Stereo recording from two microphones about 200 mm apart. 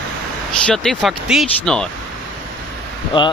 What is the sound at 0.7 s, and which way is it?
Speech, centre (ahead or behind).